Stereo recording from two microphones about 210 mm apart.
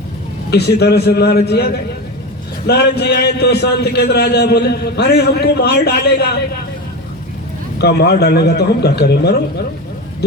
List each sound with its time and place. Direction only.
0.5 s a man's voice: 50° left (ahead or behind)
7.8 s a man's voice: 50° left (ahead or behind)